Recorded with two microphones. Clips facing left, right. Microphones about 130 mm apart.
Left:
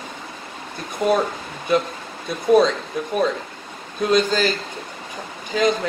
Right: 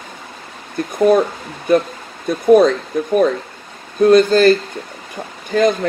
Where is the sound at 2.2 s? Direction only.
50° right (ahead or behind).